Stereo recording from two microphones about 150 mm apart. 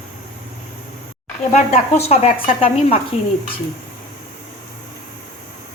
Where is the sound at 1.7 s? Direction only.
40° left (ahead or behind).